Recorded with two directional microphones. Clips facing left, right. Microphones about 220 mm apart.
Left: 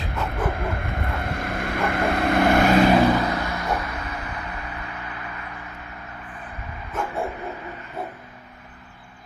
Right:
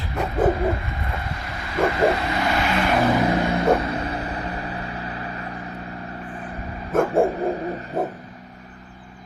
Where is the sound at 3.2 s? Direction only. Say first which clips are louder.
Right 7 dB; 25° right (ahead or behind).